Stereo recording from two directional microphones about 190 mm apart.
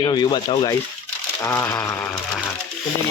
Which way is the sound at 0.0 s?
25° left (ahead or behind).